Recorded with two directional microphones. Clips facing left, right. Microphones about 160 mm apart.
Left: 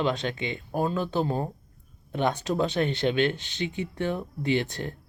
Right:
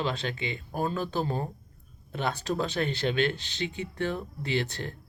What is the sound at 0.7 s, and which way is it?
Speech, 15° left (ahead or behind).